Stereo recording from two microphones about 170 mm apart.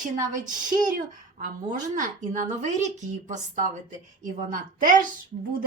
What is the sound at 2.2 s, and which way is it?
Speech, 45° right (ahead or behind).